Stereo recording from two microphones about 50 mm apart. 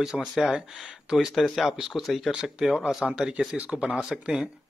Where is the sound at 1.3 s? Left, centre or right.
Centre.